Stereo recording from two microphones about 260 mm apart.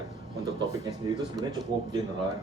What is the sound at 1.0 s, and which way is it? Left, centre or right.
Speech, centre.